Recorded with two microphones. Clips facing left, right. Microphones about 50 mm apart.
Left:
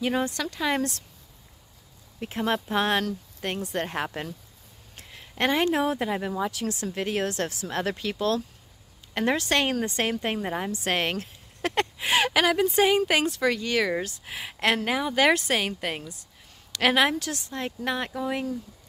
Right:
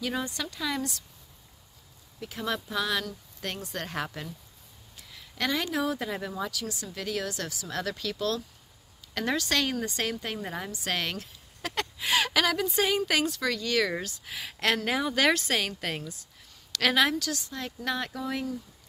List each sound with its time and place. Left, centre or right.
0.0 s speech: left
0.3 s speech: left
0.6 s speech: left
2.1 s speech: left
3.3 s speech: centre
3.6 s speech: left
6.6 s speech: left
14.9 s speech: centre